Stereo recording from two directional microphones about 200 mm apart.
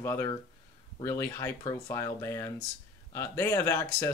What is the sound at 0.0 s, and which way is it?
Speech, 15° left (ahead or behind).